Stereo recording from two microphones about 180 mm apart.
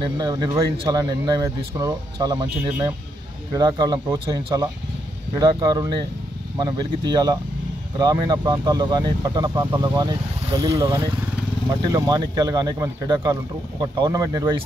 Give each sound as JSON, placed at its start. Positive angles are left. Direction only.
{"t": 0.0, "sound": "speech", "side_deg": -25}
{"t": 3.5, "sound": "speech", "side_deg": -25}